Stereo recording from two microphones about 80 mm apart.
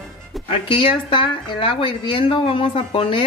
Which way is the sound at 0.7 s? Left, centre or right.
Left.